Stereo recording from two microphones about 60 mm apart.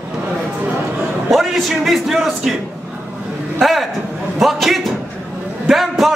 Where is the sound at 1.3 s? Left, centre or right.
Centre.